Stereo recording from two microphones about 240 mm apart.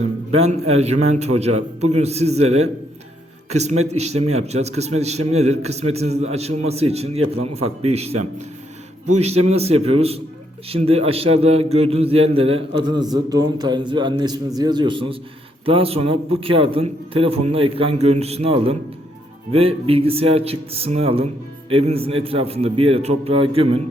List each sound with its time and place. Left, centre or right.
0.0 s a man's voice: right